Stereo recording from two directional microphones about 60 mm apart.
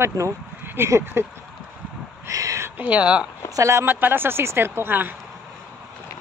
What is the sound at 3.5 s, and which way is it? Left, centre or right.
Speech, right.